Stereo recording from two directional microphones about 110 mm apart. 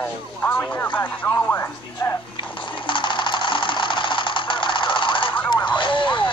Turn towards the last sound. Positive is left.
turn(degrees=50)  # may be behind; listen again after turning